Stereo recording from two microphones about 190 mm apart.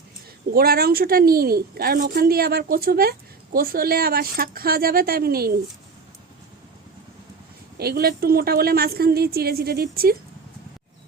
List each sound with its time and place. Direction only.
0.5 s a woman's voice: 55° right (ahead or behind)
7.8 s a woman's voice: 55° right (ahead or behind)